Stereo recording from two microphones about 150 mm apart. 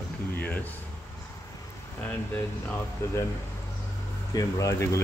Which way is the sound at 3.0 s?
15° left (ahead or behind).